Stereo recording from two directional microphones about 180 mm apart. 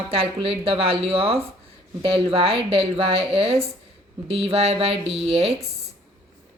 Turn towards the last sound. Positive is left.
turn(degrees=-35)  # may be behind; listen again after turning